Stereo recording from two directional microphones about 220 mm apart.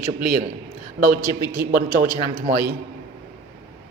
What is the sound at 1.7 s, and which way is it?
Speech, 40° right (ahead or behind).